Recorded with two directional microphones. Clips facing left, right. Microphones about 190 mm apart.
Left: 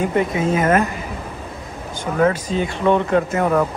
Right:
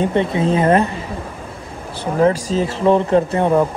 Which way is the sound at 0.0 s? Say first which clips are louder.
Right 2 dB; 30° right (ahead or behind).